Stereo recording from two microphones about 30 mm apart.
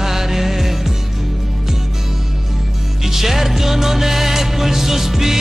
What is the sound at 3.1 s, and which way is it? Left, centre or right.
Music, centre.